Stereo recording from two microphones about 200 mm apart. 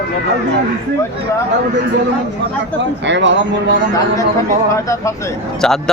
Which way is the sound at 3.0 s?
65° right (ahead or behind).